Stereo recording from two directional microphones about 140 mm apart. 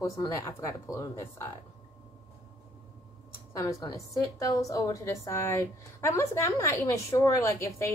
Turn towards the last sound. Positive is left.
turn(degrees=20)  # may be behind; listen again after turning